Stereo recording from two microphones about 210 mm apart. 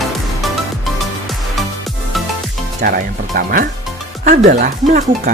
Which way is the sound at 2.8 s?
45° right (ahead or behind).